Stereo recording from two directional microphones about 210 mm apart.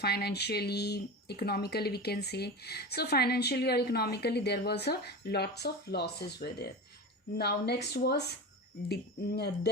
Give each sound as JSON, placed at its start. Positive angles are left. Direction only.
{"t": 0.0, "sound": "speech", "side_deg": 50}